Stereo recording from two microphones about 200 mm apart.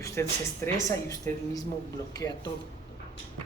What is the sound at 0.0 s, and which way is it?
Speech, 15° left (ahead or behind).